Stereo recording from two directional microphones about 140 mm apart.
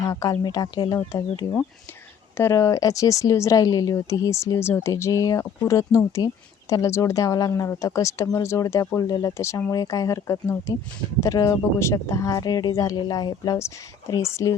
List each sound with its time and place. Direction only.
0.1 s speech: 25° left (ahead or behind)